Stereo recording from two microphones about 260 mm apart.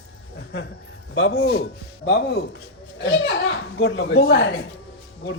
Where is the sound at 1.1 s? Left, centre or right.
Left.